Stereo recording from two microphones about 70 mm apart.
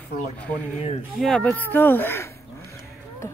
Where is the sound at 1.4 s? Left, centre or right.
Left.